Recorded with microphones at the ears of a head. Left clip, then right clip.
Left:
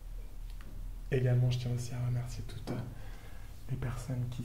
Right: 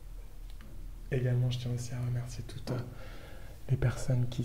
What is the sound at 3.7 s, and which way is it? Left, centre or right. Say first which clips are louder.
Speech: right 7 dB; right.